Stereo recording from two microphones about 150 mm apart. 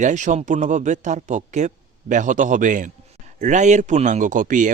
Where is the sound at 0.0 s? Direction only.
55° right (ahead or behind).